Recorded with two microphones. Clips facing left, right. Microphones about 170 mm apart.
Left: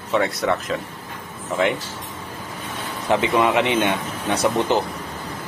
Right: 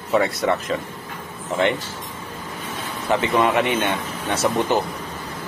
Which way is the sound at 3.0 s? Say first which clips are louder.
Left 1 dB; 15° left (ahead or behind).